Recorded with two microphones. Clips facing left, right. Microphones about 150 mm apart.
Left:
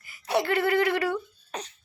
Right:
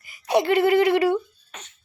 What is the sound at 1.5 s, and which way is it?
Cough, 35° left (ahead or behind).